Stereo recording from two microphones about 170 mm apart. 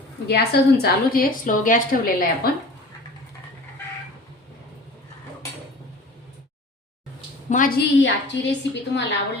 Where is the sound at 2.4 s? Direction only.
65° left (ahead or behind).